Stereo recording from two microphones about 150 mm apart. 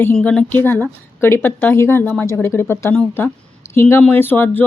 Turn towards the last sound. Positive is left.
turn(degrees=15)  # may be behind; listen again after turning